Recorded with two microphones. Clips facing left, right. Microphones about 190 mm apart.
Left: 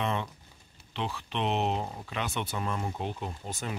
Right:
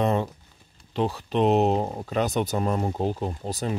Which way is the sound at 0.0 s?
40° right (ahead or behind).